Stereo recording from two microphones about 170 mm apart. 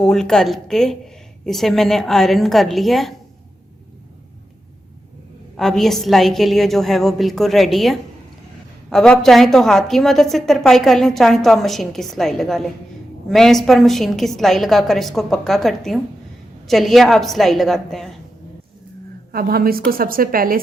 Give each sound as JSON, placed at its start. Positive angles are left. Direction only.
{"t": 0.0, "sound": "a woman's voice", "side_deg": 5}
{"t": 5.5, "sound": "a woman's voice", "side_deg": 0}
{"t": 19.3, "sound": "speech", "side_deg": -60}